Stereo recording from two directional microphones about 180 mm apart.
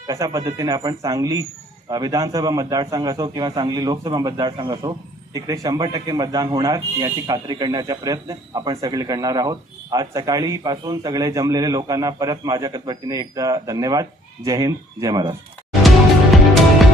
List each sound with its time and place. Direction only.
0.1 s a man's voice: 20° right (ahead or behind)